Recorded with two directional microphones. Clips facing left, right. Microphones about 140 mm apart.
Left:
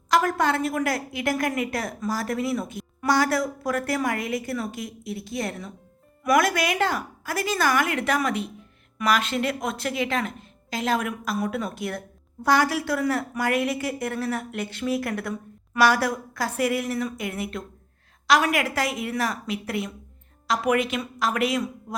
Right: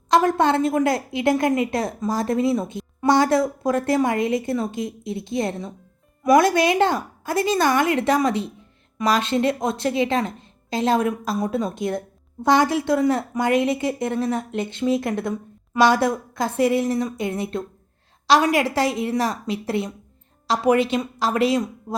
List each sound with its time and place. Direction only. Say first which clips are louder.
0.1 s a woman's voice: right 4 dB; 25° right (ahead or behind)